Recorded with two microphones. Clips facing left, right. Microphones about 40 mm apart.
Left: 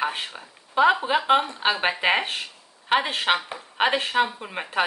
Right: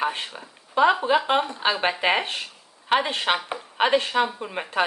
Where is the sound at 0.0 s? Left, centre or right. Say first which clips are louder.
Right 1 dB; centre.